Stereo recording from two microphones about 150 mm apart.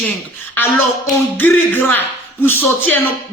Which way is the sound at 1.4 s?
15° left (ahead or behind).